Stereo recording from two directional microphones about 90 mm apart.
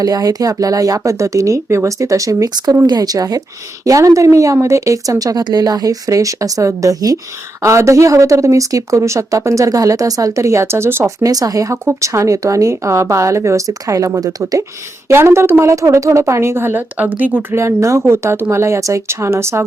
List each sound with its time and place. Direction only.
0.0 s speech: 45° right (ahead or behind); by 11.1 s 25° right (ahead or behind)
11.2 s speech: 40° right (ahead or behind)
15.0 s speech: 30° right (ahead or behind)
17.6 s speech: 30° right (ahead or behind)